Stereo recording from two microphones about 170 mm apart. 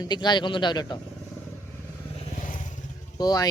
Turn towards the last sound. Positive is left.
turn(degrees=20)  # may be behind; listen again after turning